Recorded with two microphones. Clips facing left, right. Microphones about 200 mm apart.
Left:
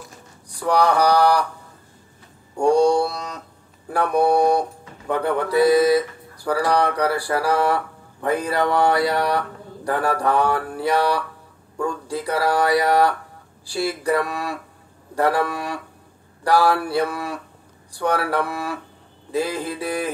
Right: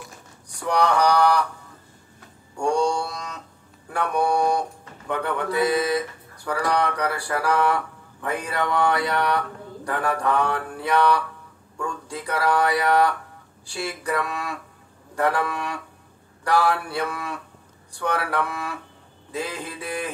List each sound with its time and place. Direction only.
0.7 s speech: 35° left (ahead or behind)
2.5 s speech: 35° left (ahead or behind)